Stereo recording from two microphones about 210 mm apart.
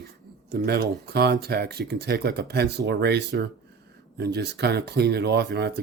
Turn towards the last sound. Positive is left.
turn(degrees=-50)  # may be behind; listen again after turning